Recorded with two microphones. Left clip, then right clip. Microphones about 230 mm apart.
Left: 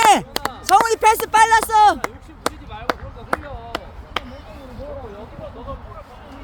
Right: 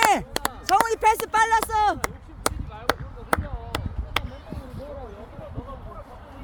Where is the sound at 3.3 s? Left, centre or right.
Right.